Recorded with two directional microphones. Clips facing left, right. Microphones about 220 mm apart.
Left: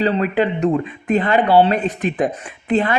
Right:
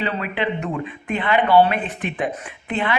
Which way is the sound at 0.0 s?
40° left (ahead or behind).